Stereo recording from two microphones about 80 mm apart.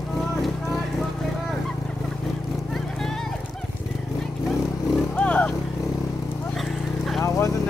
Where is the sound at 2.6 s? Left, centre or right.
Centre.